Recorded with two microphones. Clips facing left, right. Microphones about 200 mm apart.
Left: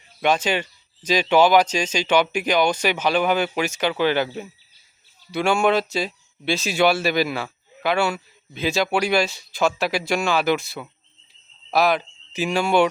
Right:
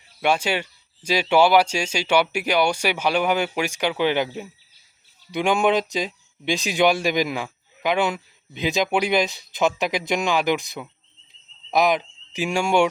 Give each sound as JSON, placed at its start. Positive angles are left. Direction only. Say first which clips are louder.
{"t": 0.2, "sound": "speech", "louder": "left 1 dB", "side_deg": -10}